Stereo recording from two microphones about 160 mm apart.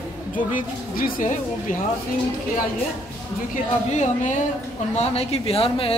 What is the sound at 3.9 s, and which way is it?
Speech, 45° left (ahead or behind).